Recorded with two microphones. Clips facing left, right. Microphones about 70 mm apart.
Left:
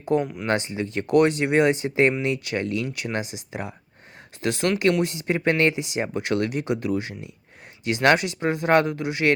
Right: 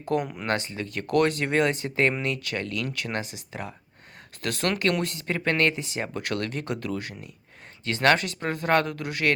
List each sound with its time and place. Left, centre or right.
0.1 s speech: left